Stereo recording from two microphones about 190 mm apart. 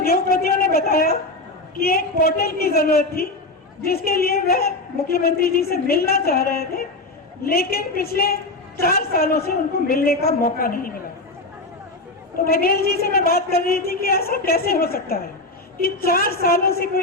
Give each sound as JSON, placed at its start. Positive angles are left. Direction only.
{"t": 0.0, "sound": "a sound", "side_deg": 50}
{"t": 1.8, "sound": "a woman's voice", "side_deg": 50}
{"t": 12.5, "sound": "a woman's voice", "side_deg": 50}